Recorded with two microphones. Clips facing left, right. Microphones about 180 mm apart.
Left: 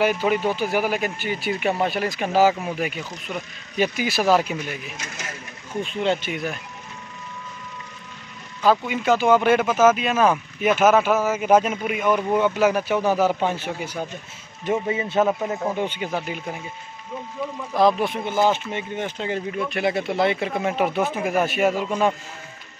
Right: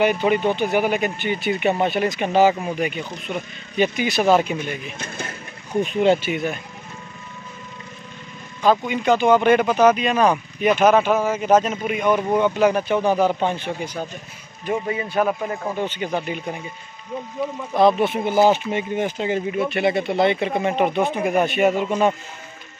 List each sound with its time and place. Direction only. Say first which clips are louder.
0.0 s speech: right 2 dB; 5° left (ahead or behind)
5.8 s speech: right 6 dB; 15° right (ahead or behind); by 6.6 s centre (ahead or behind)
8.6 s speech: right 1 dB; 5° left (ahead or behind)
14.6 s a man's voice: left 1 dB; 25° left (ahead or behind)
15.8 s speech: right 1 dB; 10° left (ahead or behind)
17.7 s speech: right 2 dB; centre (ahead or behind)